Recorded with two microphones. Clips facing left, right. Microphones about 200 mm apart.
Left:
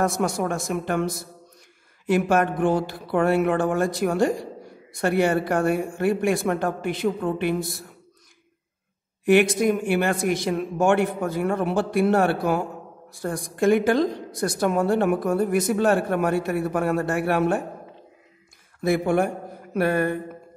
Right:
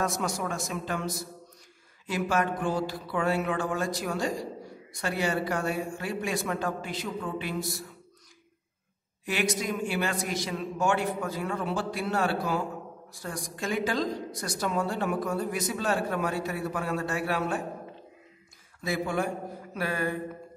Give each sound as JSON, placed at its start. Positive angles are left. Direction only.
{"t": 0.0, "sound": "a woman's voice", "side_deg": 55}
{"t": 9.2, "sound": "a woman's voice", "side_deg": 60}
{"t": 18.8, "sound": "speech", "side_deg": 55}